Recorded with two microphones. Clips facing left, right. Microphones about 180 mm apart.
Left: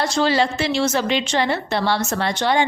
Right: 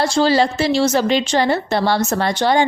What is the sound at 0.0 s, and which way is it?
A woman's voice, 30° right (ahead or behind).